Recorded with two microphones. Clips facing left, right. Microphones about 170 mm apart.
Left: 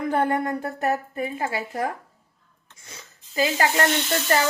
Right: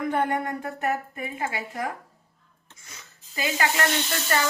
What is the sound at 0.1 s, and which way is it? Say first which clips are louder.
Speech: left 5 dB; 35° left (ahead or behind).